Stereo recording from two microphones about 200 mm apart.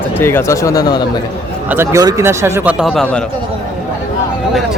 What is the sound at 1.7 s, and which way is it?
A man's voice, 15° right (ahead or behind).